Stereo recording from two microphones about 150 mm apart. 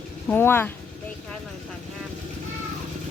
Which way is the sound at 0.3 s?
15° left (ahead or behind).